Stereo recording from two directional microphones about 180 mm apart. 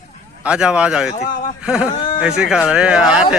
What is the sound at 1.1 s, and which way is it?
Speech, 45° left (ahead or behind).